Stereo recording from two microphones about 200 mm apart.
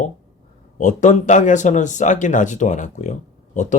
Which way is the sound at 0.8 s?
35° left (ahead or behind).